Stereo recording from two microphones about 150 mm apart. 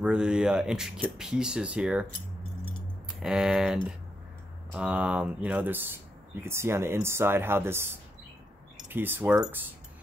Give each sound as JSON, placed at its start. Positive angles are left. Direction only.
{"t": 0.0, "sound": "speech", "side_deg": -5}
{"t": 3.2, "sound": "speech", "side_deg": -5}